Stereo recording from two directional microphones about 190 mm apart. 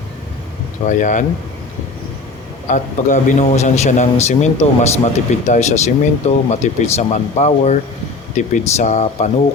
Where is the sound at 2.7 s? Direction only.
40° left (ahead or behind).